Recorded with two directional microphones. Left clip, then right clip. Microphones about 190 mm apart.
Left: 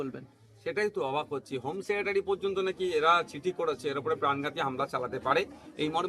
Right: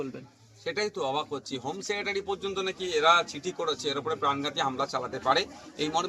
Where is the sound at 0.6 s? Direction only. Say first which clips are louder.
Even; 30° left (ahead or behind).